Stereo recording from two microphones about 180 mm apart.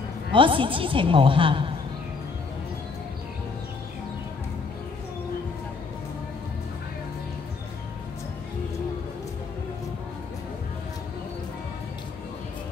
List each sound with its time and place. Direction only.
0.3 s a woman's voice: 30° right (ahead or behind)